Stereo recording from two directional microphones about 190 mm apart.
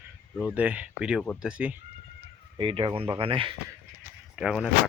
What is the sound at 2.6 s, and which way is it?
Speech, 25° right (ahead or behind).